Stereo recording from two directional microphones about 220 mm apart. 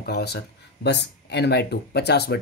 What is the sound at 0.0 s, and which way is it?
Speech, 45° left (ahead or behind).